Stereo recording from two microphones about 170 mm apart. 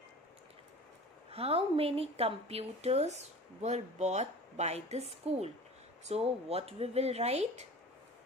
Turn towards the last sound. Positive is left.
turn(degrees=-40)  # may be behind; listen again after turning